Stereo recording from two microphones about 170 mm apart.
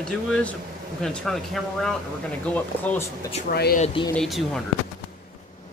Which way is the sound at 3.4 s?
65° left (ahead or behind).